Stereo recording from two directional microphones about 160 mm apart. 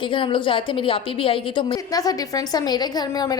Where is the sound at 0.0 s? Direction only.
30° left (ahead or behind).